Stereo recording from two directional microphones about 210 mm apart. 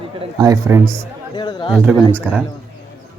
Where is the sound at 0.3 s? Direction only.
15° right (ahead or behind).